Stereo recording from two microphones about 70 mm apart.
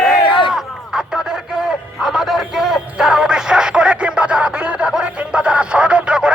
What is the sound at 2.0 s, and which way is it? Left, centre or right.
Music, centre.